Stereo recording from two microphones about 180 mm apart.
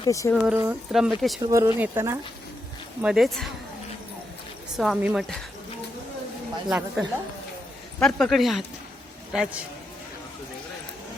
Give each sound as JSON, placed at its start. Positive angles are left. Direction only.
{"t": 0.0, "sound": "speech", "side_deg": 15}
{"t": 0.4, "sound": "speech", "side_deg": -10}
{"t": 1.4, "sound": "speech", "side_deg": -20}
{"t": 3.0, "sound": "speech", "side_deg": 0}
{"t": 4.8, "sound": "speech", "side_deg": -5}
{"t": 6.7, "sound": "speech", "side_deg": -5}